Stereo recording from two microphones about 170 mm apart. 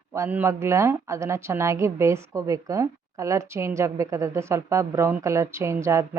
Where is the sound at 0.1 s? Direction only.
15° right (ahead or behind).